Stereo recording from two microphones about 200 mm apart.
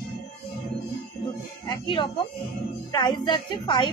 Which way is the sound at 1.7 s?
25° left (ahead or behind).